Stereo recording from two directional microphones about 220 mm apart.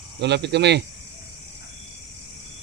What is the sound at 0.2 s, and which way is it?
Speech, 50° right (ahead or behind).